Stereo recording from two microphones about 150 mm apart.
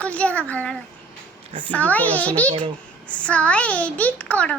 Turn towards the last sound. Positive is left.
turn(degrees=10)  # may be behind; listen again after turning